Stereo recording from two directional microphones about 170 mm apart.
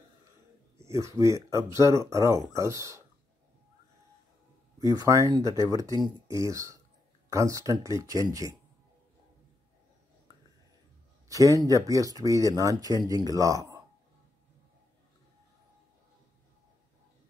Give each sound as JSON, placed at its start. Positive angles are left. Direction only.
{"t": 0.7, "sound": "speech", "side_deg": -15}
{"t": 4.7, "sound": "speech", "side_deg": -20}
{"t": 11.2, "sound": "speech", "side_deg": -20}